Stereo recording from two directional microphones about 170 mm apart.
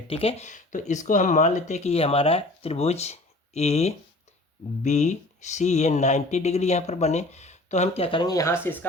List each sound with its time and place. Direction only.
0.1 s speech: 35° left (ahead or behind); by 8.9 s 10° left (ahead or behind)